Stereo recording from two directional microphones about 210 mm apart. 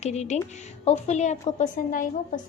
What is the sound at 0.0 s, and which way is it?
A woman's voice, 30° left (ahead or behind).